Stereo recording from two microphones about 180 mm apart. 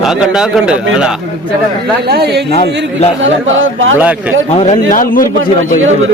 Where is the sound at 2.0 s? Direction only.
65° right (ahead or behind).